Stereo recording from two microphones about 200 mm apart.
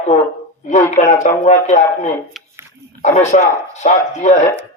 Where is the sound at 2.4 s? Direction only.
Centre (ahead or behind).